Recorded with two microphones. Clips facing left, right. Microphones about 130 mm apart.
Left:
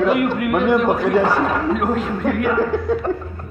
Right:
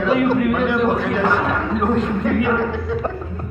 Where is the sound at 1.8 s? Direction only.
5° left (ahead or behind).